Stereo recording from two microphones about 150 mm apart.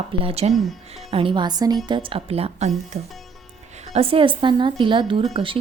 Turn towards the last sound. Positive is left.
turn(degrees=-35)  # may be behind; listen again after turning